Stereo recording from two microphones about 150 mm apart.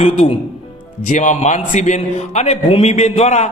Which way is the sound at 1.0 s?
55° left (ahead or behind).